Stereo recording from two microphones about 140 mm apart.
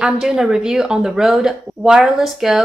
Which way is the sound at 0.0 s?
5° right (ahead or behind).